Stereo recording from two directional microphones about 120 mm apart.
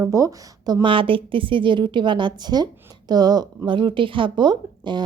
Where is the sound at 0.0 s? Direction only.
25° right (ahead or behind).